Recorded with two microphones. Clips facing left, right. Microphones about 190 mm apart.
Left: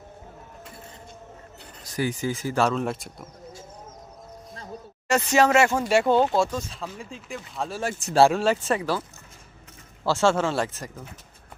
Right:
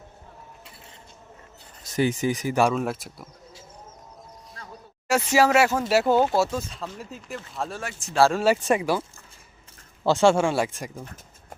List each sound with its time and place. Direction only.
1.8 s speech: 25° right (ahead or behind)
2.8 s speech: centre (ahead or behind)
5.0 s speech: 5° right (ahead or behind)
8.6 s speech: 15° right (ahead or behind)
10.0 s speech: 15° right (ahead or behind)